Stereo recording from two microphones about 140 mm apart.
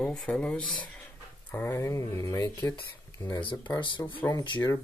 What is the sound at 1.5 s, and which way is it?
Speech, 20° left (ahead or behind).